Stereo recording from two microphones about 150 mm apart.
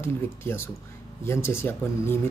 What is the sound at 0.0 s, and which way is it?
Speech, 15° left (ahead or behind).